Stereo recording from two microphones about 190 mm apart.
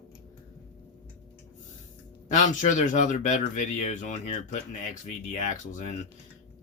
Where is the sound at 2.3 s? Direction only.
40° left (ahead or behind).